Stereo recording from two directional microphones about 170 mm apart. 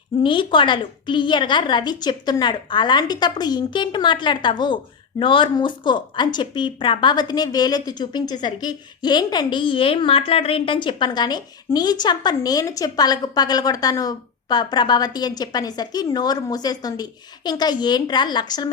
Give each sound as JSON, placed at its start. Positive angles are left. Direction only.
{"t": 0.2, "sound": "speech", "side_deg": 30}